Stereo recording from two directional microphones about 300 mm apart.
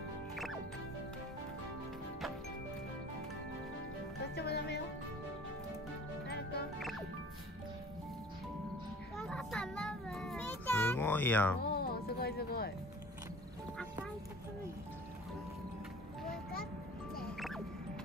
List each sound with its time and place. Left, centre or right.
4.4 s music: left
6.2 s music: left
9.1 s child singing: centre
11.6 s music: left